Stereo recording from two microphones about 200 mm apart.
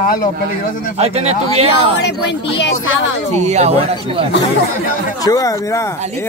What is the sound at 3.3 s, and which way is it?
Speech, 35° right (ahead or behind).